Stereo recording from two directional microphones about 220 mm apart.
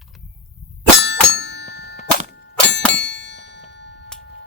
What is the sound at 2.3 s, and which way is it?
Clang, 50° left (ahead or behind).